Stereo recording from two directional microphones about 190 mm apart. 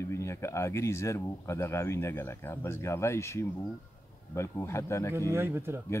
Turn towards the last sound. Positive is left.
turn(degrees=-15)  # may be behind; listen again after turning